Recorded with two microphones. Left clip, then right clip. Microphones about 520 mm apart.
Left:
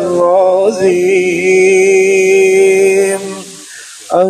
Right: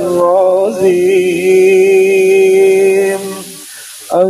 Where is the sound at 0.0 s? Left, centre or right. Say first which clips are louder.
Even; centre.